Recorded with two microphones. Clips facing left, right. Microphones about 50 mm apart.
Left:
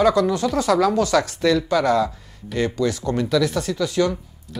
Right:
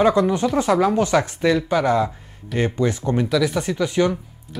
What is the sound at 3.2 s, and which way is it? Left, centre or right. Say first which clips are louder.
Speech: left 1 dB; centre.